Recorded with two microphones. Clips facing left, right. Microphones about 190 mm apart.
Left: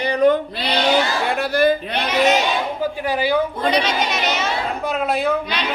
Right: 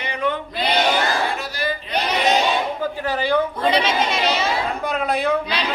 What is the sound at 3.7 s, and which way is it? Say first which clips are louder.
Speech: even; 30° right (ahead or behind).